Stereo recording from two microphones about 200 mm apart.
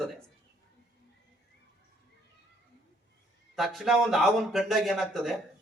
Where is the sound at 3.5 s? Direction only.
Centre (ahead or behind).